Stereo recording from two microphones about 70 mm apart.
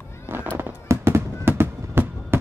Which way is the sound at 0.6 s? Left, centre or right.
Right.